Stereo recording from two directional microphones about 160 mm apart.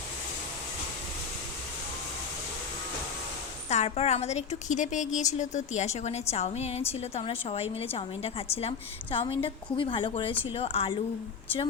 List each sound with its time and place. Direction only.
3.7 s a woman's voice: 45° left (ahead or behind)